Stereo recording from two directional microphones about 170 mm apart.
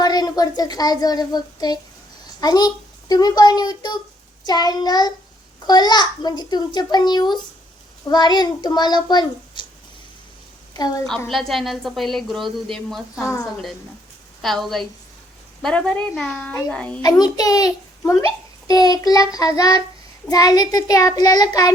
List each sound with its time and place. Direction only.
0.0 s speech: 25° left (ahead or behind)
10.8 s a woman's voice: 25° left (ahead or behind)
11.3 s a woman's voice: centre (ahead or behind)
13.2 s speech: 20° left (ahead or behind)
14.4 s a woman's voice: centre (ahead or behind)
17.0 s speech: 25° left (ahead or behind)